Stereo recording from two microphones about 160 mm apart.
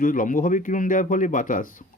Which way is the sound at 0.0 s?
55° left (ahead or behind).